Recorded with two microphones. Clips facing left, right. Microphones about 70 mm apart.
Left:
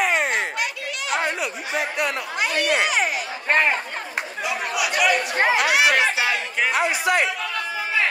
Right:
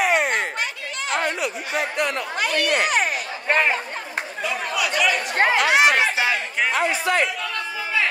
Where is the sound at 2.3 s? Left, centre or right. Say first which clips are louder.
Even; right.